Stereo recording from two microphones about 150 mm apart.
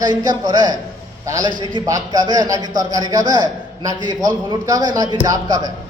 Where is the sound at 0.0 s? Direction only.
25° right (ahead or behind).